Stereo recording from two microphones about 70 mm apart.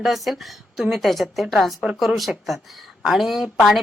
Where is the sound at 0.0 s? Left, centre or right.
Centre.